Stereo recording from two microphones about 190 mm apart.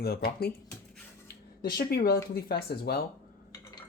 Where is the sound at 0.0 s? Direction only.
55° left (ahead or behind).